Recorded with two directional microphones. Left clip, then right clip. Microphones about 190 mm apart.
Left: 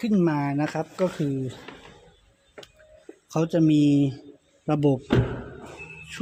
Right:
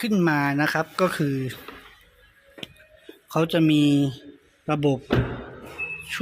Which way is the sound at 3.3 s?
20° left (ahead or behind).